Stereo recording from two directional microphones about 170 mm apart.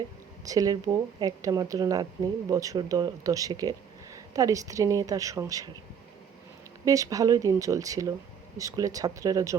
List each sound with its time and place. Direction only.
0.4 s speech: 20° right (ahead or behind)
6.8 s speech: 20° right (ahead or behind)